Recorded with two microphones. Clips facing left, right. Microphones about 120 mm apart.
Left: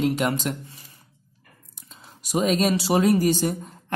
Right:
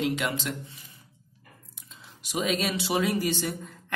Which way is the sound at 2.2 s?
40° left (ahead or behind).